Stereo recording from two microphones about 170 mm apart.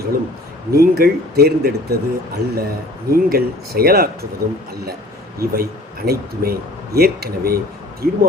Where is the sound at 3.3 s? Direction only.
65° right (ahead or behind).